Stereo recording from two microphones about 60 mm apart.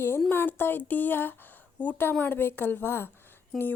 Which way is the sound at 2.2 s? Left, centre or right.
Left.